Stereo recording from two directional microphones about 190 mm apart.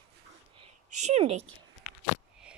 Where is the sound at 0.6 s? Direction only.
35° right (ahead or behind).